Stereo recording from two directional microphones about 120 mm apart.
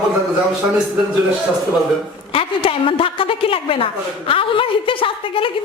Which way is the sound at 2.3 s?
50° left (ahead or behind).